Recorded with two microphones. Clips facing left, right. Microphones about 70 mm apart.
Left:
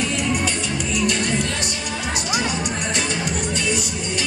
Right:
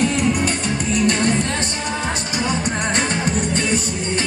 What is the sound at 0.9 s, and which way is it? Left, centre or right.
Music, right.